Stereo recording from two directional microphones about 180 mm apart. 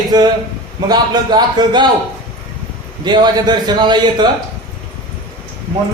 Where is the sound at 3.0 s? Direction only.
25° right (ahead or behind).